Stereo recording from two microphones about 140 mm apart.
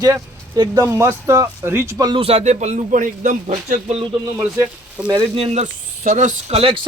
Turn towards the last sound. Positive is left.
turn(degrees=-45)  # may be behind; listen again after turning